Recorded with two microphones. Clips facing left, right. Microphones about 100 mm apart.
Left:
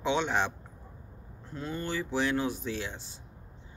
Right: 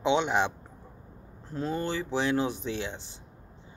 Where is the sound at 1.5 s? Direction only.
25° right (ahead or behind).